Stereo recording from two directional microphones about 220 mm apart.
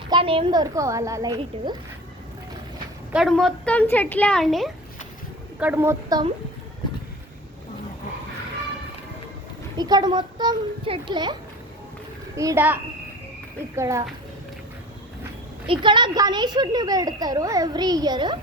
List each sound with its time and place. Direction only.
0.1 s speech: 25° right (ahead or behind)
3.1 s a woman's voice: centre (ahead or behind)
9.7 s a woman's voice: 20° right (ahead or behind)
12.4 s speech: 10° right (ahead or behind)
15.6 s a woman's voice: 20° right (ahead or behind)